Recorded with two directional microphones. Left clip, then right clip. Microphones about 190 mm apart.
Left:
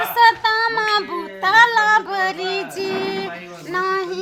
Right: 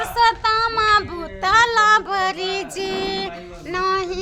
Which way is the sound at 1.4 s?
25° right (ahead or behind).